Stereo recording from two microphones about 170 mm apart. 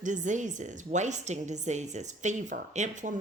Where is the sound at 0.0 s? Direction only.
45° right (ahead or behind).